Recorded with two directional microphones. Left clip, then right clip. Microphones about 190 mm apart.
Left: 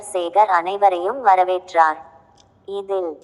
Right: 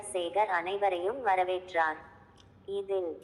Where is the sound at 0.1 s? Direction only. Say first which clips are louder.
Left 13 dB; 25° left (ahead or behind).